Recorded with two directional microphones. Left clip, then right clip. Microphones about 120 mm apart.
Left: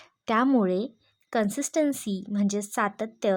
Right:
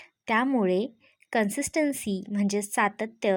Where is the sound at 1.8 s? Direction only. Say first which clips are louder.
Even; 30° left (ahead or behind).